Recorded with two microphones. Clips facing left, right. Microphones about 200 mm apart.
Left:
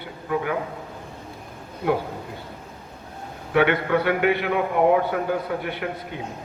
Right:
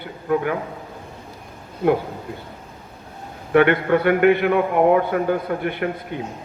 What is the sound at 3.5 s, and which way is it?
A man's voice, 50° right (ahead or behind).